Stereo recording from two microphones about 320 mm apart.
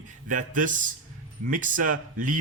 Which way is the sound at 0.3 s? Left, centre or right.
Right.